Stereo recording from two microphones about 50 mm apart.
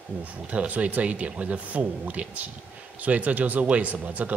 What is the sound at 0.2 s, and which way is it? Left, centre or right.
Speech, right.